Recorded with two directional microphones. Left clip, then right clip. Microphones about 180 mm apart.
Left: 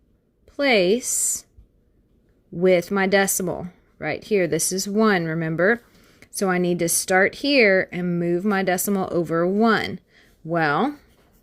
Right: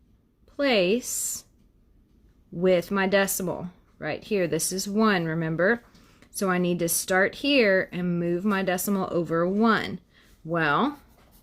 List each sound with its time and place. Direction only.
0.4 s speech: 30° left (ahead or behind)
2.6 s speech: 30° left (ahead or behind)
6.1 s a sound: 30° left (ahead or behind)
6.7 s speech: 30° left (ahead or behind)